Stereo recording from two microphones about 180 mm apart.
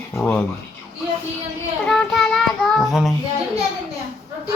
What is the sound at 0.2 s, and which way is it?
Speech, 10° left (ahead or behind).